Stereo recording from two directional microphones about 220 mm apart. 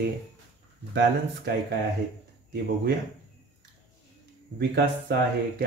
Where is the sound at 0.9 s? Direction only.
50° right (ahead or behind).